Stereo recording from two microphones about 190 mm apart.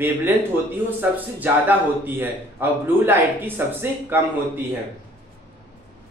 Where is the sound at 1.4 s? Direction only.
10° right (ahead or behind).